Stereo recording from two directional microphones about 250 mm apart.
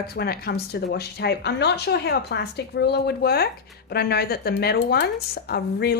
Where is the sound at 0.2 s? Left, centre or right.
Left.